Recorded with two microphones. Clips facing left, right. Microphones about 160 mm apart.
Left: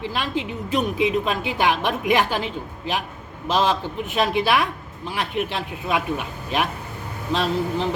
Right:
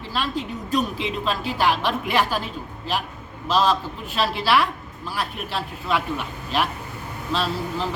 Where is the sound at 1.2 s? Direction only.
15° left (ahead or behind).